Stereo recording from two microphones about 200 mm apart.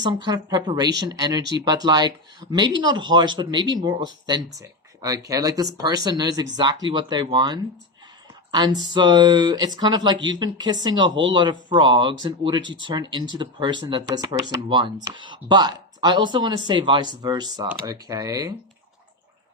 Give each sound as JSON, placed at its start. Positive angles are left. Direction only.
{"t": 0.1, "sound": "speech", "side_deg": -20}